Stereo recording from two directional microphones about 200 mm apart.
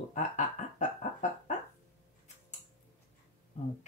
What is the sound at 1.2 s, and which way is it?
Speech, 35° left (ahead or behind).